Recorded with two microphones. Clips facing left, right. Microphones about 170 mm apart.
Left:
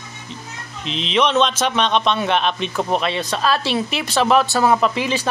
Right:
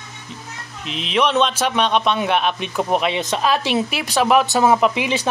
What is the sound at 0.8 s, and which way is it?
A man's voice, 5° right (ahead or behind).